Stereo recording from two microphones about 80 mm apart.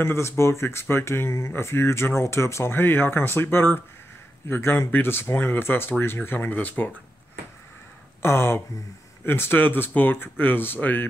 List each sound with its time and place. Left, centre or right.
0.0 s speech: left
8.2 s speech: left